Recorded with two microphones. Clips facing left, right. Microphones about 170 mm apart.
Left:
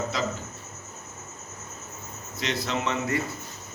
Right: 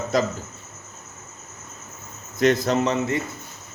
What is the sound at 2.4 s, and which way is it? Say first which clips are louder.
Speech: right 10 dB; 50° right (ahead or behind).